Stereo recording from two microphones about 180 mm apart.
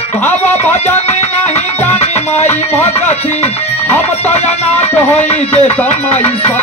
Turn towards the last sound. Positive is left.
turn(degrees=35)  # may be behind; listen again after turning